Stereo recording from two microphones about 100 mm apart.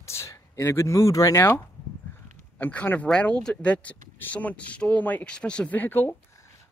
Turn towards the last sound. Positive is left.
turn(degrees=20)  # may be behind; listen again after turning